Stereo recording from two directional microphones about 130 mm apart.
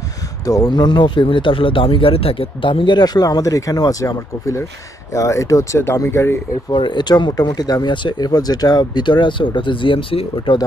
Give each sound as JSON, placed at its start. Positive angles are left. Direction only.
{"t": 0.5, "sound": "speech", "side_deg": 30}
{"t": 6.7, "sound": "speech", "side_deg": 35}